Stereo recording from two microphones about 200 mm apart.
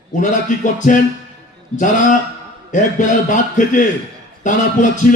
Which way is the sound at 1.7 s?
40° left (ahead or behind).